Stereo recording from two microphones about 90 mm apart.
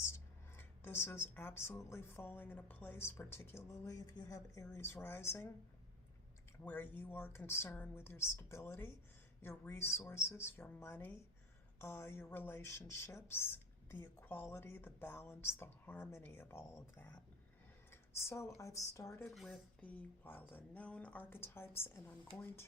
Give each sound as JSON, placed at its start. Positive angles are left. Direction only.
{"t": 0.0, "sound": "speech", "side_deg": 25}
{"t": 3.8, "sound": "speech", "side_deg": 40}
{"t": 6.7, "sound": "speech", "side_deg": 20}
{"t": 19.3, "sound": "speech", "side_deg": 0}
{"t": 20.5, "sound": "speech", "side_deg": 15}